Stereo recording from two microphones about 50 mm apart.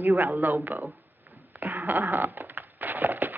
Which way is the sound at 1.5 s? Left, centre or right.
Right.